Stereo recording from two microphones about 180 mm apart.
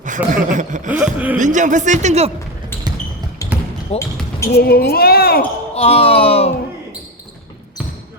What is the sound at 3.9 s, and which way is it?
Speech, 35° left (ahead or behind).